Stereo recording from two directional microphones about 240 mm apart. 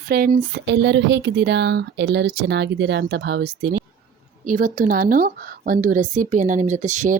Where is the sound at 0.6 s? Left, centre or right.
Right.